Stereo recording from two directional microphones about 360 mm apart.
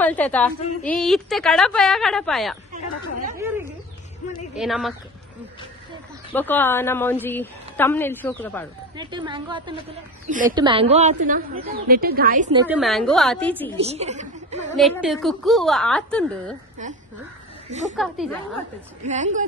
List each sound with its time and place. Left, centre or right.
0.0 s a woman's voice: centre
2.7 s speech: right
3.3 s a sound: centre
4.6 s a woman's voice: centre
6.3 s a woman's voice: centre
8.9 s a woman's voice: centre
12.5 s a woman's voice: centre
13.7 s a woman's voice: centre
14.8 s a woman's voice: centre
17.9 s a woman's voice: centre
19.0 s a woman's voice: centre